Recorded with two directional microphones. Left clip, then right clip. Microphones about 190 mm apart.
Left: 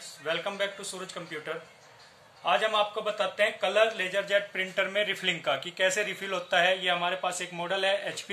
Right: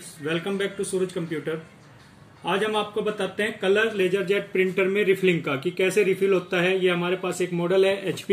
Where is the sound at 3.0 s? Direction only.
20° left (ahead or behind).